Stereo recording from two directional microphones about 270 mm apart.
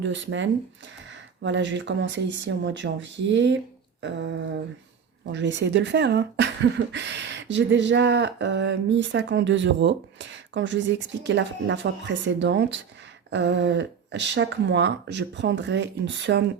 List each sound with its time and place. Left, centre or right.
0.0 s speech: right